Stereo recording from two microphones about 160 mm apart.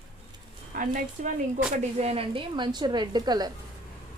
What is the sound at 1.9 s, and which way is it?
Speech, 40° right (ahead or behind).